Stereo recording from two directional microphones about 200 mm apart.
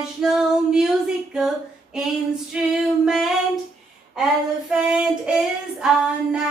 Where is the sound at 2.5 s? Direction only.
5° right (ahead or behind).